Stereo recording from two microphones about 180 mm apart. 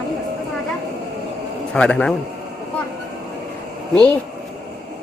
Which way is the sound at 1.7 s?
5° left (ahead or behind).